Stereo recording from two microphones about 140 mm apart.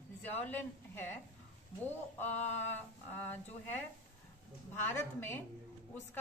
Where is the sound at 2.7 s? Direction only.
15° left (ahead or behind).